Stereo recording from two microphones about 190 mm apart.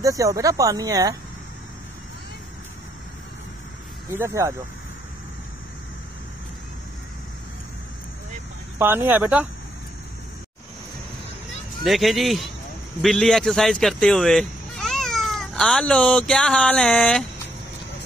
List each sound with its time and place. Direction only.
0.0 s speech: 15° right (ahead or behind)
4.1 s speech: 15° right (ahead or behind)
8.7 s speech: 10° right (ahead or behind)
11.8 s speech: centre (ahead or behind)